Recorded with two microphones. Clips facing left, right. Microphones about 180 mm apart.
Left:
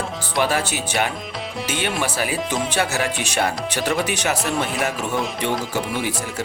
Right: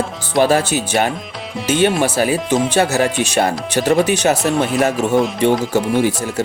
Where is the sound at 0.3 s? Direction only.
40° right (ahead or behind).